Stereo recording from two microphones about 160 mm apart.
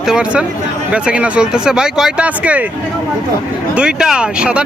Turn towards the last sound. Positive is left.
turn(degrees=-5)  # may be behind; listen again after turning